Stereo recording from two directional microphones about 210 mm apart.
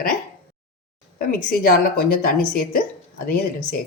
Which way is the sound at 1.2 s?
45° left (ahead or behind).